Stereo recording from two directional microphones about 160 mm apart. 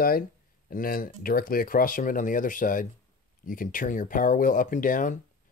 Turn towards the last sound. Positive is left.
turn(degrees=55)  # may be behind; listen again after turning